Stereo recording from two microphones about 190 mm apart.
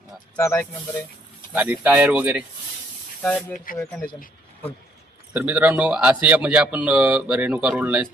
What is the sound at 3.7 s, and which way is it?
Speech, 45° left (ahead or behind).